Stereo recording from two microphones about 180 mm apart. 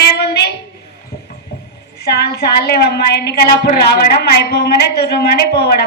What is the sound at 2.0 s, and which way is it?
A woman's voice, 65° left (ahead or behind).